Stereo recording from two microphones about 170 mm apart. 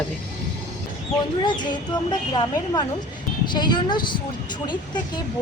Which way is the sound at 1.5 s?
25° left (ahead or behind).